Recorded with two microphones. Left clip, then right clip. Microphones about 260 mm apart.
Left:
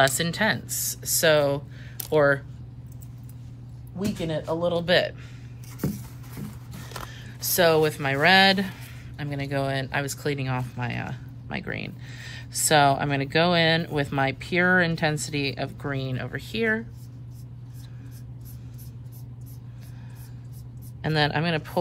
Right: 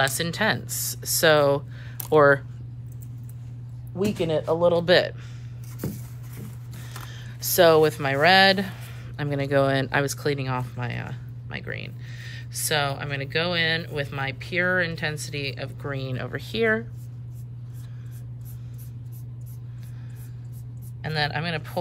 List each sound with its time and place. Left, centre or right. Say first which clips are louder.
0.0 s speech: left 1 dB; centre
3.9 s speech: right 5 dB; right
7.5 s speech: right 3 dB; centre
21.0 s speech: left 3 dB; centre